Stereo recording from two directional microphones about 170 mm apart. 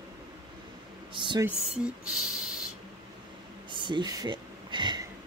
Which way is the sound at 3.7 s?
30° right (ahead or behind).